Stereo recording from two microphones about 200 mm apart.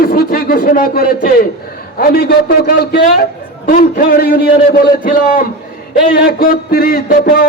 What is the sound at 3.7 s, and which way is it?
A man's voice, 45° left (ahead or behind).